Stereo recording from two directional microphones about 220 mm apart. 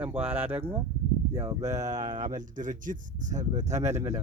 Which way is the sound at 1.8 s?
35° right (ahead or behind).